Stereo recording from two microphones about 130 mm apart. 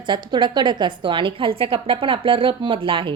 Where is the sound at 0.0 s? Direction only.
35° right (ahead or behind).